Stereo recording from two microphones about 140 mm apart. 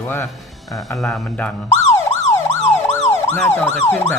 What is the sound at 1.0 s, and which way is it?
Emergency vehicle, 10° left (ahead or behind).